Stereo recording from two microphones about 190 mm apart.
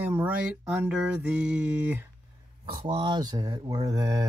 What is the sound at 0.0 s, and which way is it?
Speech, 10° right (ahead or behind).